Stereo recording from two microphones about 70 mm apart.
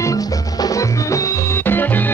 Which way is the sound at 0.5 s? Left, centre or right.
Left.